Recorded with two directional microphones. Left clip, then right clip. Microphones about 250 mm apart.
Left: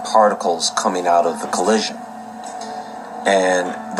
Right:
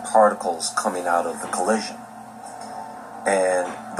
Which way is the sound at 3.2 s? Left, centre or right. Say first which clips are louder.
Left 4 dB; left.